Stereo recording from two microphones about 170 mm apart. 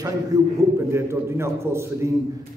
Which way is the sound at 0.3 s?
20° right (ahead or behind).